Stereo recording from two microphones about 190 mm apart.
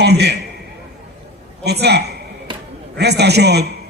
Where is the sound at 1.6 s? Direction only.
60° right (ahead or behind).